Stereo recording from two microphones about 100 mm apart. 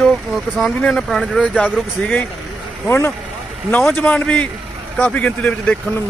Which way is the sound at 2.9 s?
25° left (ahead or behind).